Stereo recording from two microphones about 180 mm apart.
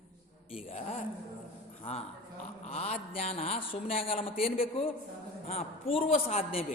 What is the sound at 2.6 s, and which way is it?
A man's voice, 35° left (ahead or behind).